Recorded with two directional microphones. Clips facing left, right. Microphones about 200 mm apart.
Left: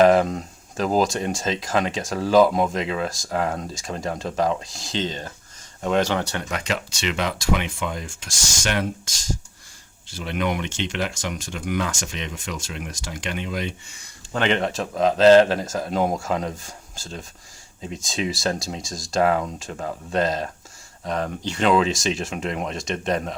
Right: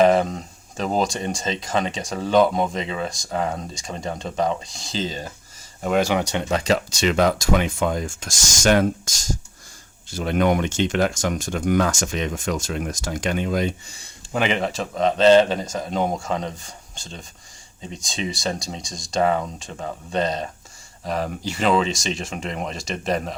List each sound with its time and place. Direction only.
0.0 s speech: centre (ahead or behind); by 14.1 s 35° right (ahead or behind)
14.3 s speech: 5° right (ahead or behind)